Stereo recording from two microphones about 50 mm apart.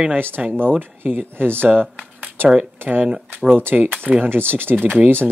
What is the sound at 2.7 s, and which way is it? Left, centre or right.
A man's voice, right.